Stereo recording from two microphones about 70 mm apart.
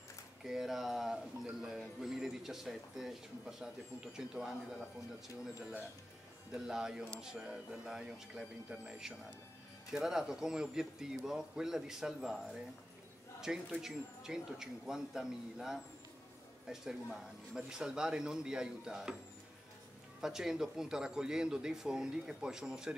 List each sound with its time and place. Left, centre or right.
0.4 s a man's voice: centre
5.6 s a man's voice: centre
13.7 s a man's voice: centre
20.2 s a man's voice: centre